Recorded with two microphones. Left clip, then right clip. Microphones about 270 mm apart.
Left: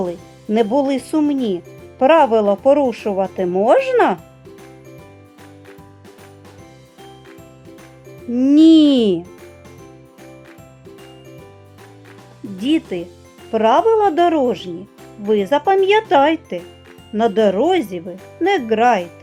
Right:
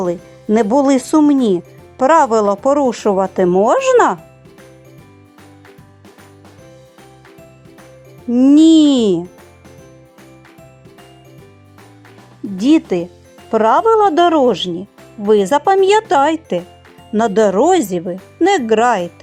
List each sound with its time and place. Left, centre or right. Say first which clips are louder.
0.0 s speech: right 4 dB; right
8.3 s speech: right 2 dB; centre
12.5 s speech: right 6 dB; right